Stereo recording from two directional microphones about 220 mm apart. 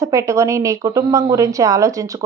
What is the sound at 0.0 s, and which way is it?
A woman's voice, 15° right (ahead or behind).